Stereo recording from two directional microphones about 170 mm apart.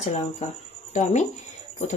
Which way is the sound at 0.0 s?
45° left (ahead or behind).